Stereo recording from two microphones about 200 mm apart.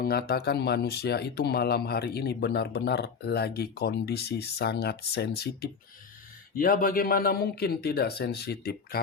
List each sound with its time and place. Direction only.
0.0 s speech: 50° left (ahead or behind)